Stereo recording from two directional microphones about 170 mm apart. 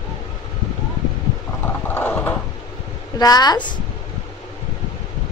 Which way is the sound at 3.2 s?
25° left (ahead or behind).